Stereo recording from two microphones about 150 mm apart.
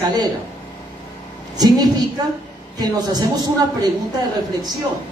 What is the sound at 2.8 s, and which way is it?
Speech, 25° right (ahead or behind).